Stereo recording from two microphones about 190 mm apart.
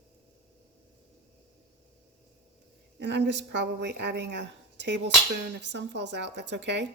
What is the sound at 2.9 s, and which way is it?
Speech, 65° right (ahead or behind).